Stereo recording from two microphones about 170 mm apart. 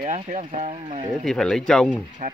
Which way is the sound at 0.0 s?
45° right (ahead or behind).